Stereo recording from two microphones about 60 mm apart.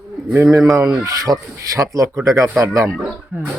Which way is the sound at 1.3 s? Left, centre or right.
Right.